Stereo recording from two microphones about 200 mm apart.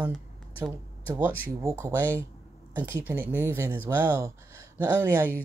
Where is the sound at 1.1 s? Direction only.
10° right (ahead or behind).